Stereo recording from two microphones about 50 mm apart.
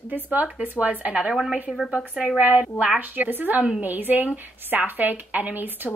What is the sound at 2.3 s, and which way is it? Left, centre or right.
Speech, right.